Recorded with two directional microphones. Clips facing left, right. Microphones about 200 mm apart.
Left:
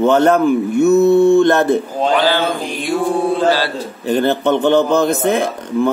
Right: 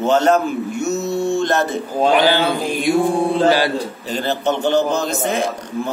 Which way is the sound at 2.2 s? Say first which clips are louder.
Even; 15° right (ahead or behind).